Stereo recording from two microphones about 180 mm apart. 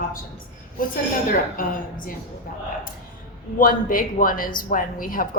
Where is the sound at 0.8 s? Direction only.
50° left (ahead or behind).